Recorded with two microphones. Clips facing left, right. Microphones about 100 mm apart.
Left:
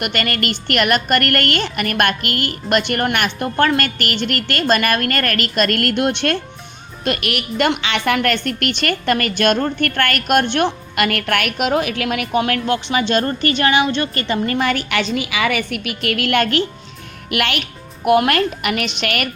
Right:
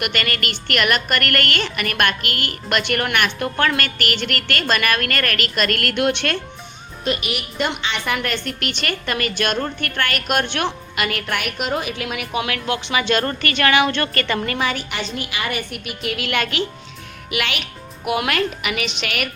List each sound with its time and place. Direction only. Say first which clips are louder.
0.0 s a woman's voice: left 3 dB; 40° left (ahead or behind)
7.0 s a woman's voice: left 3 dB; 65° left (ahead or behind)
12.4 s a woman's voice: left 4 dB; 40° left (ahead or behind)
14.6 s a woman's voice: left 5 dB; 60° left (ahead or behind); by 15.9 s 90° left
16.0 s a woman's voice: left 5 dB; 60° left (ahead or behind)